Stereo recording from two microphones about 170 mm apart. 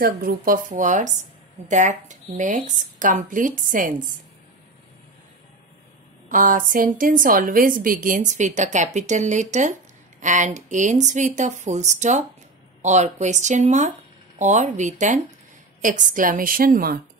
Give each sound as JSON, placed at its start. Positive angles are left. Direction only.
{"t": 0.0, "sound": "a woman's voice", "side_deg": -60}
{"t": 6.2, "sound": "a woman's voice", "side_deg": -50}